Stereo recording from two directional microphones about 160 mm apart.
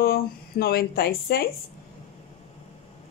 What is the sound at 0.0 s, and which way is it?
Speech, 75° left (ahead or behind).